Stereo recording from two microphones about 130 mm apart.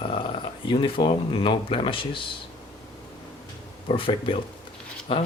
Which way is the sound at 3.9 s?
40° left (ahead or behind).